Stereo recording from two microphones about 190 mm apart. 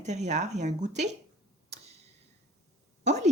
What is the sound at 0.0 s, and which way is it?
Speech, 40° right (ahead or behind).